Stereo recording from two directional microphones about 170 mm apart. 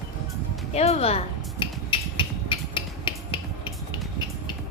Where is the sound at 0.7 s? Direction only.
40° left (ahead or behind).